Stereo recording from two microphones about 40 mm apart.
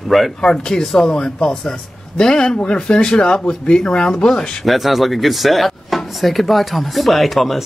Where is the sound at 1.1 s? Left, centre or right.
Left.